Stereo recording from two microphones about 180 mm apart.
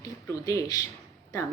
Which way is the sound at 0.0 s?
20° left (ahead or behind).